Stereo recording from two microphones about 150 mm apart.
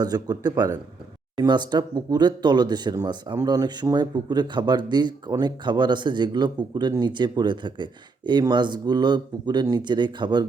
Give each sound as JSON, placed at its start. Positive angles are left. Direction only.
{"t": 0.0, "sound": "speech", "side_deg": -25}